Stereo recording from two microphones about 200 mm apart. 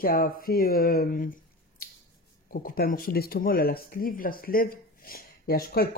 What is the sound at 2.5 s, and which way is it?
Speech, 50° left (ahead or behind).